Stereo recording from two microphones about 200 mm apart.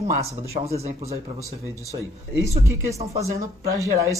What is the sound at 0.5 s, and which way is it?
Speech, 30° right (ahead or behind).